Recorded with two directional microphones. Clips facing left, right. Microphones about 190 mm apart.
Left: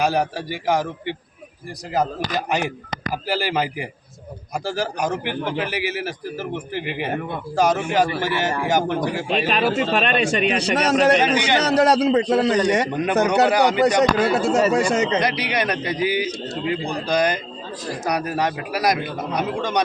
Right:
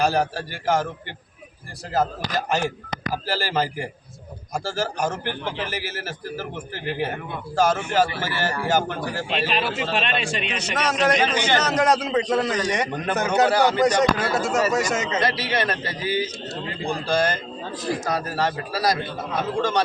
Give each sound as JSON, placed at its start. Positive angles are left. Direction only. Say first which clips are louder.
{"t": 0.0, "sound": "a man's voice", "louder": "left 1 dB", "side_deg": 10}
{"t": 3.5, "sound": "a man's voice", "louder": "left 1 dB", "side_deg": 10}
{"t": 9.3, "sound": "a man's voice", "louder": "left 5 dB", "side_deg": 45}
{"t": 11.3, "sound": "a man's voice", "louder": "left 2 dB", "side_deg": 15}
{"t": 11.6, "sound": "a man's voice", "louder": "left 4 dB", "side_deg": 35}
{"t": 13.1, "sound": "a man's voice", "louder": "left 2 dB", "side_deg": 15}
{"t": 14.4, "sound": "a man's voice", "louder": "left 4 dB", "side_deg": 30}
{"t": 15.2, "sound": "a man's voice", "louder": "left 1 dB", "side_deg": 15}